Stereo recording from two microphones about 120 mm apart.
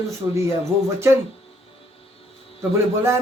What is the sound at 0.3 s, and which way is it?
Speech, 20° right (ahead or behind).